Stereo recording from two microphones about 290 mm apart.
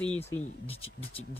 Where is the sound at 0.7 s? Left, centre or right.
Centre.